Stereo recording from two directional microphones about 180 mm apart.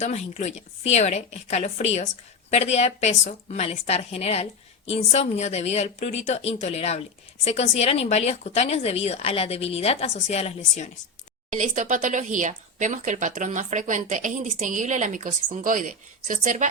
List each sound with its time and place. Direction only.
0.0 s a woman's voice: 35° left (ahead or behind)
11.5 s speech: 45° right (ahead or behind)